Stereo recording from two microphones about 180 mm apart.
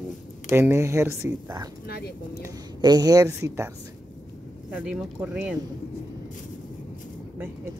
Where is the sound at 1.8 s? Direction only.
60° left (ahead or behind).